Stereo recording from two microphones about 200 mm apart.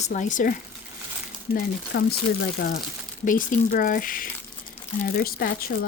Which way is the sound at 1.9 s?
55° left (ahead or behind).